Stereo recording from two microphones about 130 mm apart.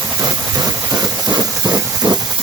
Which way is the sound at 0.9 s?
30° right (ahead or behind).